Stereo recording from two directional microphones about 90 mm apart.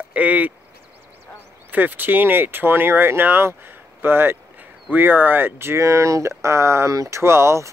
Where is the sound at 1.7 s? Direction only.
20° right (ahead or behind).